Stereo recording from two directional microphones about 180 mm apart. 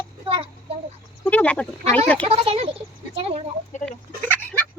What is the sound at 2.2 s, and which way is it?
Speech, 35° right (ahead or behind).